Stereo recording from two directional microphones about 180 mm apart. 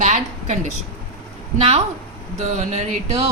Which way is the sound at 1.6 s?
35° right (ahead or behind).